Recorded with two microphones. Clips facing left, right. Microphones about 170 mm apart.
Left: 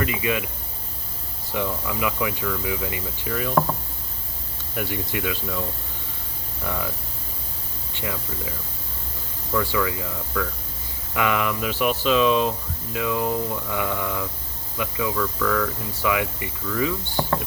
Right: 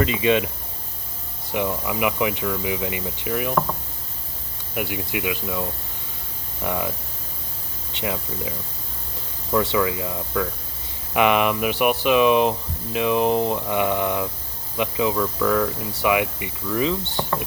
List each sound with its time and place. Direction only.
0.0 s speech: 25° right (ahead or behind)
1.5 s speech: 20° right (ahead or behind)
4.7 s speech: 10° right (ahead or behind)
7.9 s speech: 20° right (ahead or behind)
9.7 s speech: 20° right (ahead or behind)
13.2 s mantra: 85° right
13.6 s speech: 20° right (ahead or behind)